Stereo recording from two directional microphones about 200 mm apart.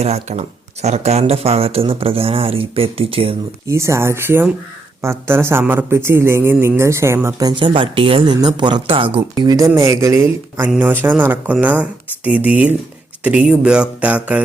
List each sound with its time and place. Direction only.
0.0 s speech: 35° right (ahead or behind)
3.7 s speech: 15° right (ahead or behind)